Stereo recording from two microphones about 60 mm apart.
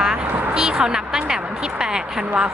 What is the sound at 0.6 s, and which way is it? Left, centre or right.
Speech, centre.